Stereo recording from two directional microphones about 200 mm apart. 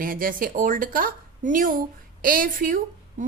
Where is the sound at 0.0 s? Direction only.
45° right (ahead or behind).